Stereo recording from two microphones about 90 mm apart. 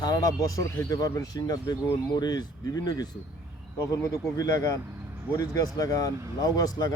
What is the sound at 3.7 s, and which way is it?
A man's voice, 35° left (ahead or behind).